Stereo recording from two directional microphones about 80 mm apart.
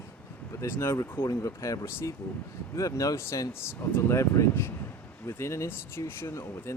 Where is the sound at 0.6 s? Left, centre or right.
Left.